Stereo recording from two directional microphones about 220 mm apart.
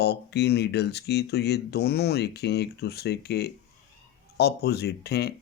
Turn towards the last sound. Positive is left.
turn(degrees=45)  # may be behind; listen again after turning